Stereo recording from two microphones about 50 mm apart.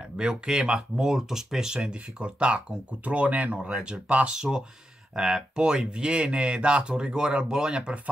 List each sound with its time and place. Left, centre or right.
0.2 s speech: centre